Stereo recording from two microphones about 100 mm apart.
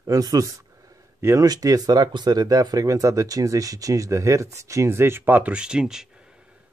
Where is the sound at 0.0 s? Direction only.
40° right (ahead or behind); by 6.0 s 5° right (ahead or behind).